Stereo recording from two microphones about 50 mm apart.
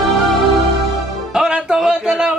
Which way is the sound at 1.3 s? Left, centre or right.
Centre.